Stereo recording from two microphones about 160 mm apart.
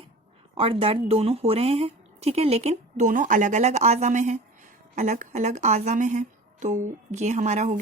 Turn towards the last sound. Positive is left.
turn(degrees=-45)  # may be behind; listen again after turning